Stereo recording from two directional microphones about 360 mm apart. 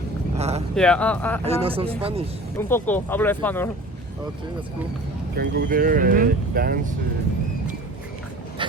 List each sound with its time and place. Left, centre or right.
0.3 s a sound: centre
0.8 s speech: centre
1.5 s speech: centre
2.6 s speech: centre
5.4 s speech: right